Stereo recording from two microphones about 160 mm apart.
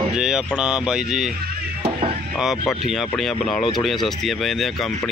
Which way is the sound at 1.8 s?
35° right (ahead or behind).